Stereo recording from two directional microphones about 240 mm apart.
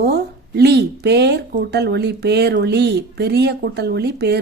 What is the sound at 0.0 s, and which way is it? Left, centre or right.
Speech, right.